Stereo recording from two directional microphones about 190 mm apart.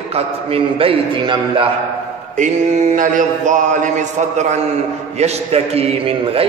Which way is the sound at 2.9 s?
45° right (ahead or behind).